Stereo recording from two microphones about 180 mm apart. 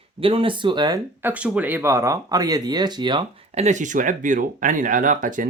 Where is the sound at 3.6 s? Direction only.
45° right (ahead or behind).